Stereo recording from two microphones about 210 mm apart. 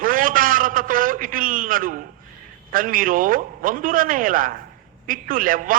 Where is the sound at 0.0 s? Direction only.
40° right (ahead or behind).